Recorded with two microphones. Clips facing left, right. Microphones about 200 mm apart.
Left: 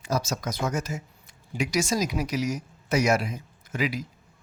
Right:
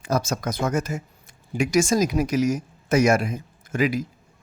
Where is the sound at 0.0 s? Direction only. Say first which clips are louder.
Right 4 dB; 55° right (ahead or behind).